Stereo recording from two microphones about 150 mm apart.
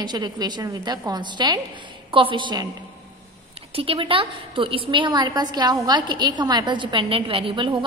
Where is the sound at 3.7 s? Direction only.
35° right (ahead or behind).